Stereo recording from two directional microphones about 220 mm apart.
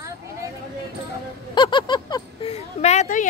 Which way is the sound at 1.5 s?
20° left (ahead or behind).